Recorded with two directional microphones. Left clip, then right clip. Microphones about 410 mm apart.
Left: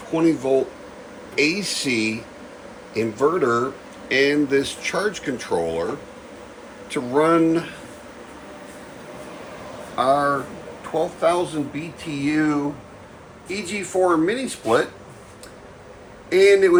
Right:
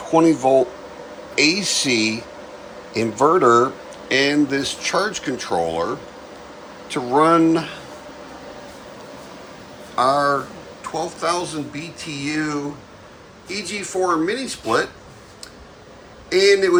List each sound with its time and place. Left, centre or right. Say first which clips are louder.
0.1 s speech: right 5 dB; centre
6.9 s speech: right 3 dB; centre
9.9 s speech: right 2 dB; centre
16.3 s speech: left 1 dB; centre